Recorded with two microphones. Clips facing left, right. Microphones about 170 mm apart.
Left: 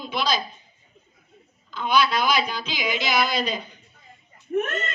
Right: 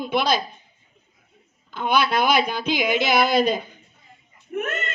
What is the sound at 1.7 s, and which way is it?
Speech, 55° right (ahead or behind).